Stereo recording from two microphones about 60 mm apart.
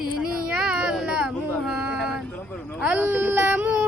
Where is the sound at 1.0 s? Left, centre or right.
Centre.